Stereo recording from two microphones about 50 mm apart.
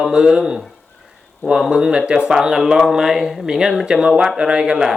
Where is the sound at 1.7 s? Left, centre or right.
Centre.